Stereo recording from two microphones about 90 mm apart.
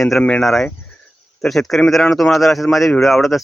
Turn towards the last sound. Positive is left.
turn(degrees=0)  # may be behind; listen again after turning